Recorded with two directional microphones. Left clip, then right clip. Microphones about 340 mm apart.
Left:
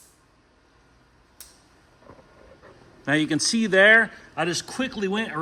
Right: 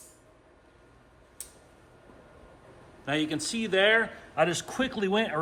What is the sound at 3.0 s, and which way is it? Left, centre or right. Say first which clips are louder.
A man's voice: left 7 dB; centre.